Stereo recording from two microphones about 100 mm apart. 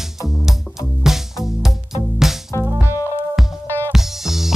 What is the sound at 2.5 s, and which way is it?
Music, 35° left (ahead or behind).